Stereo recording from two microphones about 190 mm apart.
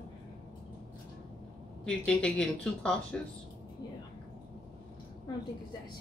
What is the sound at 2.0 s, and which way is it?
Speech, 5° left (ahead or behind).